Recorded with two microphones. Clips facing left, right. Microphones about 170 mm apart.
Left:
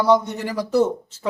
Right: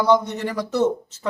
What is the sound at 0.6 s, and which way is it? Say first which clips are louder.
Speech: left 2 dB; 30° left (ahead or behind).